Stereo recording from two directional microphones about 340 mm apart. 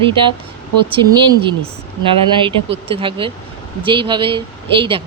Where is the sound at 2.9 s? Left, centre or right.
Centre.